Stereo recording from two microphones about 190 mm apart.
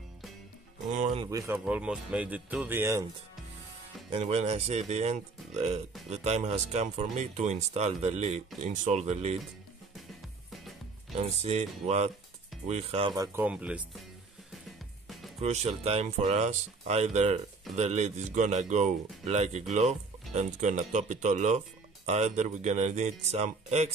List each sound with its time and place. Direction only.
0.9 s speech: 30° right (ahead or behind)
1.6 s speech: 5° right (ahead or behind)
4.1 s speech: 35° right (ahead or behind)
11.1 s music: centre (ahead or behind)
11.4 s speech: 35° right (ahead or behind)
13.1 s speech: 20° right (ahead or behind)
13.4 s speech: 5° right (ahead or behind)
15.4 s speech: 35° right (ahead or behind)